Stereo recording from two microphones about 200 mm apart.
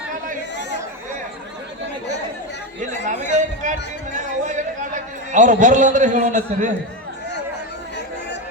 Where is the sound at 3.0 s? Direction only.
40° right (ahead or behind).